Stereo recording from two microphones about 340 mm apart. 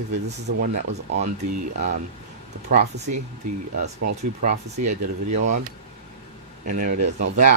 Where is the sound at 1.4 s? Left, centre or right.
Right.